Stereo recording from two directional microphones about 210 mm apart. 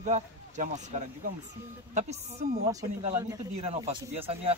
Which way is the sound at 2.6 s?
15° right (ahead or behind).